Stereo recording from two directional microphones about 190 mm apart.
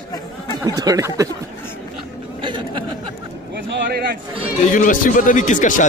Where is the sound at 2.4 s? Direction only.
25° right (ahead or behind).